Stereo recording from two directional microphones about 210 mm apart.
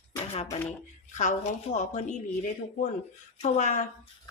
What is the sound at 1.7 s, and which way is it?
Speech, 35° left (ahead or behind).